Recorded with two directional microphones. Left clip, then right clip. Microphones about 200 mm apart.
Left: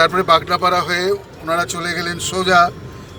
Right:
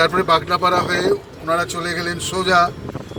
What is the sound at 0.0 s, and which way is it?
A man's voice, 20° left (ahead or behind).